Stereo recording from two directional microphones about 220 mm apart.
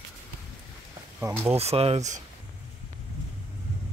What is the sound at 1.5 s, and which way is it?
Speech, 25° right (ahead or behind).